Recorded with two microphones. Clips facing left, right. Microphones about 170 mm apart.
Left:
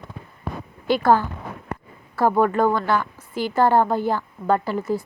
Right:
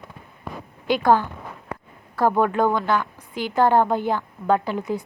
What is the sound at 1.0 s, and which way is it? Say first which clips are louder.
Speech: even; 15° right (ahead or behind).